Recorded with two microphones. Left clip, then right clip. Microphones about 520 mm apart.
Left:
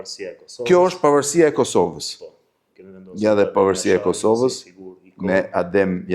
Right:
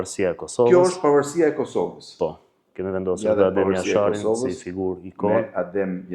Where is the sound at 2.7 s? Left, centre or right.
Right.